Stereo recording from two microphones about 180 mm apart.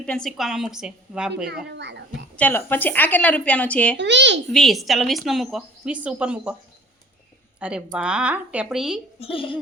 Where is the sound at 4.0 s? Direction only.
80° right.